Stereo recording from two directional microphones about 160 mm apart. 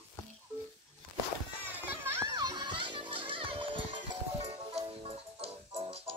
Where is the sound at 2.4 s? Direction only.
30° right (ahead or behind).